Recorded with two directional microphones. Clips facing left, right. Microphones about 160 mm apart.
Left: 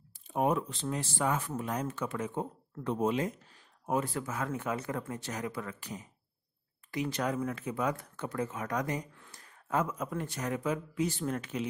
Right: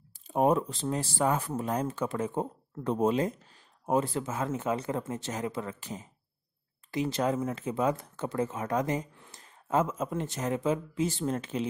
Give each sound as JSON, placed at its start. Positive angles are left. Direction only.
{"t": 0.3, "sound": "speech", "side_deg": -35}